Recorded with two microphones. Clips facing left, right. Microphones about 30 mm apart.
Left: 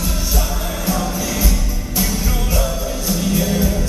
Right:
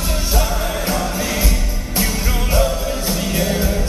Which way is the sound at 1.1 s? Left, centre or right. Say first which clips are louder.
Right 1 dB; right.